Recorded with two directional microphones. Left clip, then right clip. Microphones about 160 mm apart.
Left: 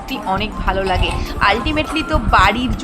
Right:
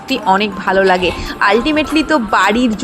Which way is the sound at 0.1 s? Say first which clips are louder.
Right 7 dB; 30° right (ahead or behind).